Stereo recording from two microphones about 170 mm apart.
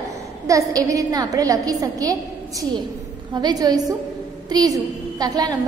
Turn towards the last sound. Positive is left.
turn(degrees=-25)  # may be behind; listen again after turning